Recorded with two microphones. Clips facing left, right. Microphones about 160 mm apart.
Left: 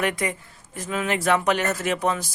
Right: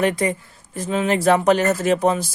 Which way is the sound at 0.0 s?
30° right (ahead or behind).